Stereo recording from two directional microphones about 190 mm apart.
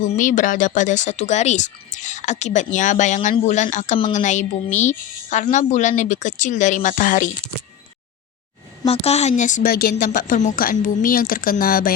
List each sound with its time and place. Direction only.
0.1 s a woman's voice: 45° left (ahead or behind)
8.9 s a woman's voice: 35° left (ahead or behind); by 11.9 s 50° left (ahead or behind)